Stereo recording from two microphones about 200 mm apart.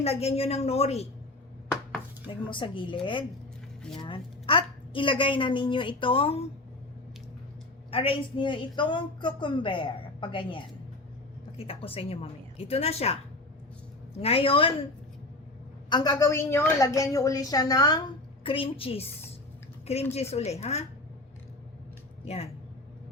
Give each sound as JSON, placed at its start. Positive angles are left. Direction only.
{"t": 0.0, "sound": "a woman's voice", "side_deg": 30}
{"t": 2.2, "sound": "a woman's voice", "side_deg": 25}
{"t": 7.9, "sound": "a woman's voice", "side_deg": 30}
{"t": 14.2, "sound": "a woman's voice", "side_deg": 30}
{"t": 15.9, "sound": "a woman's voice", "side_deg": 20}
{"t": 20.1, "sound": "a woman's voice", "side_deg": 30}
{"t": 22.2, "sound": "speech", "side_deg": 30}